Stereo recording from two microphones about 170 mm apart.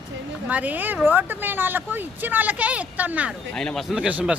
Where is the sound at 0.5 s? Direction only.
10° right (ahead or behind).